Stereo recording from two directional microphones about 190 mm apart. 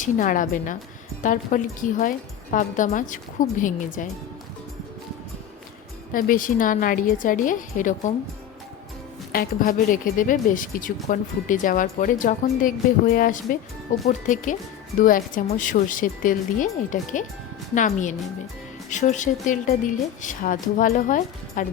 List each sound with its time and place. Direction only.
0.0 s speech: 45° left (ahead or behind)
6.1 s speech: 45° left (ahead or behind)
9.3 s a woman's voice: 50° left (ahead or behind)